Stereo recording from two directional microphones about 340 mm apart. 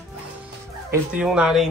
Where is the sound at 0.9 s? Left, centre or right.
Centre.